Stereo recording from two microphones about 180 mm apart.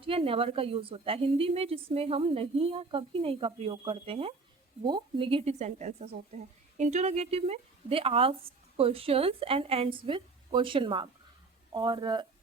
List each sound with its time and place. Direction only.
0.0 s a woman's voice: 30° right (ahead or behind)